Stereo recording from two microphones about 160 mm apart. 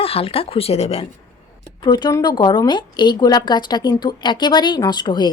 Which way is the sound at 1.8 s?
25° left (ahead or behind).